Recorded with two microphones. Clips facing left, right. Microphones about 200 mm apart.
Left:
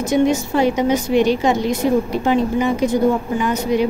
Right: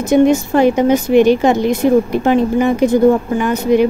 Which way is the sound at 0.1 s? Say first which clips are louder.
Right 6 dB; 55° right (ahead or behind).